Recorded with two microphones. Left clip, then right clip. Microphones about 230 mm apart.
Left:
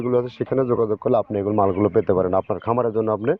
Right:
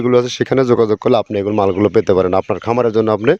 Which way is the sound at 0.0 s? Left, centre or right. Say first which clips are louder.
Right 8 dB; right.